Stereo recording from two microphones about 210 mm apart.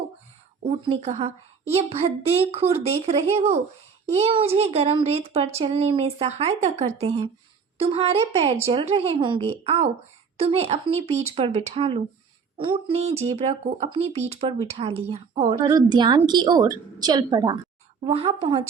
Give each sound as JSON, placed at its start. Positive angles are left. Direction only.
{"t": 0.9, "sound": "speech", "side_deg": -30}